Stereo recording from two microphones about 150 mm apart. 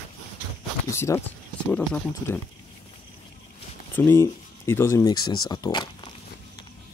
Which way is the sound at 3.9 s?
15° left (ahead or behind).